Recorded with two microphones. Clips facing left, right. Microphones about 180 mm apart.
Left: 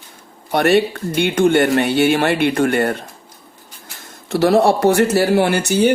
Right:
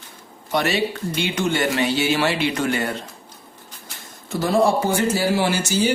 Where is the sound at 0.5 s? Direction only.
60° left (ahead or behind).